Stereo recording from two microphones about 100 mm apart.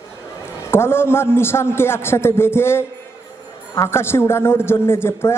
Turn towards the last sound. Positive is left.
turn(degrees=25)  # may be behind; listen again after turning